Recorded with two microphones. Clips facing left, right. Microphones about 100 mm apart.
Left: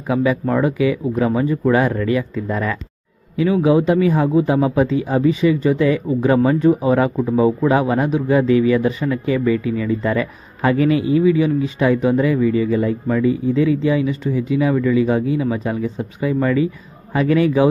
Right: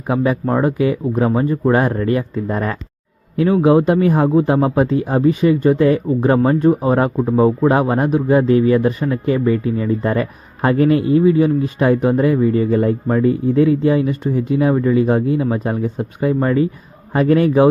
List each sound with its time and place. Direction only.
0.1 s speech: 40° right (ahead or behind)
3.6 s speech: 55° right (ahead or behind)
13.1 s speech: 40° right (ahead or behind)
13.3 s speech: 55° right (ahead or behind)
14.7 s speech: 40° right (ahead or behind)
16.2 s speech: 35° right (ahead or behind); by 17.7 s 50° right (ahead or behind)